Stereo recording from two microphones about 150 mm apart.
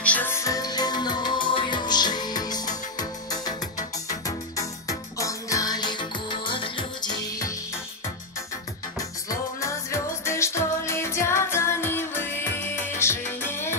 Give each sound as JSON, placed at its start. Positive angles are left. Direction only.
{"t": 0.0, "sound": "music", "side_deg": 10}
{"t": 9.6, "sound": "music", "side_deg": 20}